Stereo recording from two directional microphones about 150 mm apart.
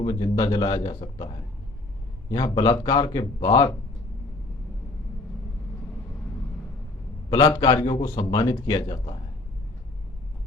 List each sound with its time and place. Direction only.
0.0 s speech: 30° left (ahead or behind)
2.6 s speech: 25° left (ahead or behind)
7.3 s speech: 25° left (ahead or behind)